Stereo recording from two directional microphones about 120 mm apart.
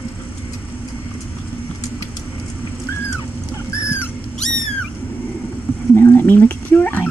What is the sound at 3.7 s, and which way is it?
Dog, 25° left (ahead or behind).